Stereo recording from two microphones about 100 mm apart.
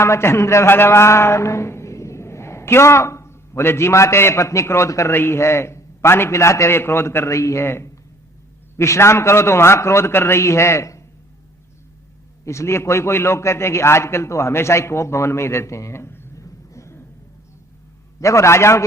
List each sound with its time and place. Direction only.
0.0 s a man's voice: 25° left (ahead or behind)
12.5 s a man's voice: 30° left (ahead or behind)
18.2 s a man's voice: 30° left (ahead or behind)